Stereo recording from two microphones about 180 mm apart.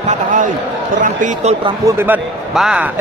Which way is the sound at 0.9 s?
45° right (ahead or behind).